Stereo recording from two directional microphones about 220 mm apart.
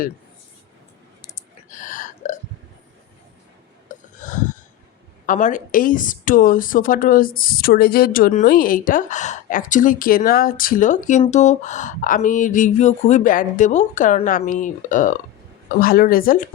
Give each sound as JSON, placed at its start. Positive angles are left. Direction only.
{"t": 1.7, "sound": "burping", "side_deg": 35}
{"t": 3.8, "sound": "a sound", "side_deg": 35}
{"t": 5.2, "sound": "a woman's voice", "side_deg": 35}